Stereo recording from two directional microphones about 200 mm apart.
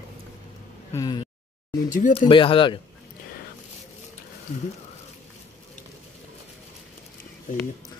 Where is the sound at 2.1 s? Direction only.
25° left (ahead or behind).